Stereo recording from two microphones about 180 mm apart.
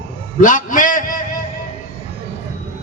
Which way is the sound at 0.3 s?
45° left (ahead or behind).